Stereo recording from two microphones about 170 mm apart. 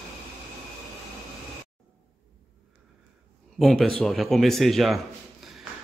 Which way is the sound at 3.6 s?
Centre (ahead or behind).